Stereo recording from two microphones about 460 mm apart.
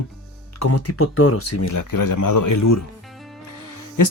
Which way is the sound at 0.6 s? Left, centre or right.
Left.